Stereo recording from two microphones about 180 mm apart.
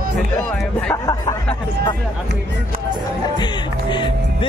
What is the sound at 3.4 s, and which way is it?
Music, 25° left (ahead or behind).